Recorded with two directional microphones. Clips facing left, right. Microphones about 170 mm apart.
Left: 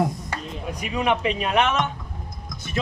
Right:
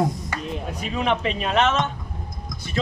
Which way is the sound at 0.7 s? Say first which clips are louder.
Left 1 dB; 15° left (ahead or behind).